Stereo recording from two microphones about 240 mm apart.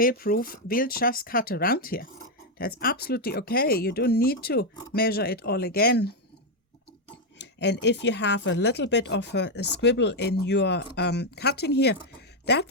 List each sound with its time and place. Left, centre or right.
0.0 s speech: left
7.3 s speech: left